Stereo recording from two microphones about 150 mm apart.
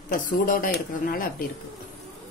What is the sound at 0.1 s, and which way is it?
Speech, 65° left (ahead or behind).